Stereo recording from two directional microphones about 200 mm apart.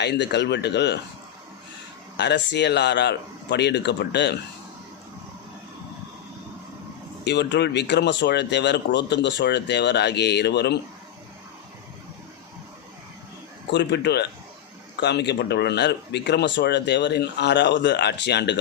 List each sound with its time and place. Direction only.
0.0 s speech: 55° left (ahead or behind)
2.1 s speech: 60° left (ahead or behind)
7.3 s speech: 60° left (ahead or behind)
13.7 s speech: 60° left (ahead or behind)